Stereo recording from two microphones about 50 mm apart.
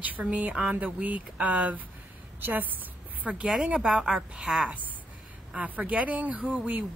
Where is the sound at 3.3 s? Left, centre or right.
Centre.